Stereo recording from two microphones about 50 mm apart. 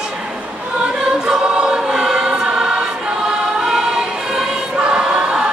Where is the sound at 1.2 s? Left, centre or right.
Centre.